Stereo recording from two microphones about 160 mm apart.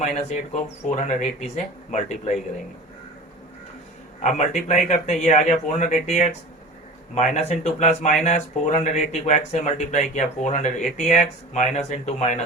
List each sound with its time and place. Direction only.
0.5 s speech: 50° left (ahead or behind)
4.2 s speech: 50° left (ahead or behind)